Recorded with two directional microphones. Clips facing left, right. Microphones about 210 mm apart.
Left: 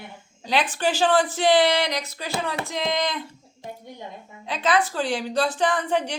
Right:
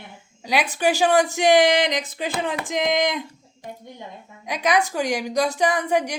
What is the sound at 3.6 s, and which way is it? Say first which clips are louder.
Speech: even; 25° left (ahead or behind).